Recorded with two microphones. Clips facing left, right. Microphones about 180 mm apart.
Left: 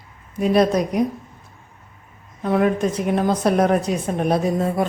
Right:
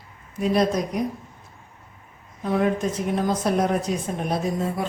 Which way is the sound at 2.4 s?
65° left (ahead or behind).